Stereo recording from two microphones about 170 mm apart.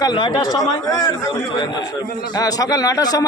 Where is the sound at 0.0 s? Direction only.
25° left (ahead or behind).